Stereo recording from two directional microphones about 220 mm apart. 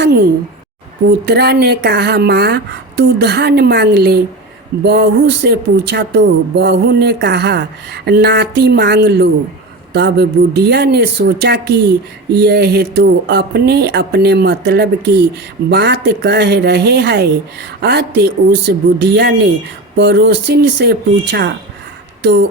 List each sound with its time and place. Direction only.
1.3 s speech: 45° right (ahead or behind)